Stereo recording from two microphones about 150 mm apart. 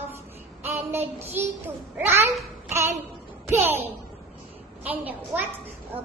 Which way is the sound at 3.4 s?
15° right (ahead or behind).